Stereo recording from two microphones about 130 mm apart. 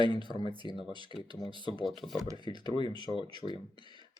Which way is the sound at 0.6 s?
40° left (ahead or behind).